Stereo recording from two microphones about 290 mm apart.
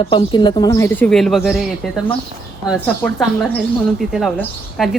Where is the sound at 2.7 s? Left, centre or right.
Centre.